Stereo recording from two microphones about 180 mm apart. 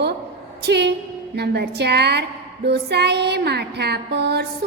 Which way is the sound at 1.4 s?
65° right (ahead or behind).